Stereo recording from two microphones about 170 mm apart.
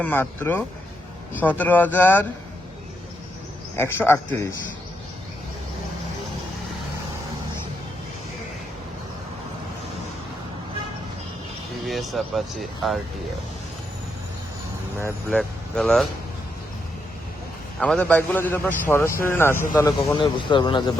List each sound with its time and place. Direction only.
0.0 s a man's voice: 10° left (ahead or behind)
3.8 s a man's voice: 15° left (ahead or behind)
11.9 s speech: centre (ahead or behind)
15.3 s speech: 5° left (ahead or behind)
17.7 s a man's voice: 5° left (ahead or behind)
20.2 s speech: 30° left (ahead or behind)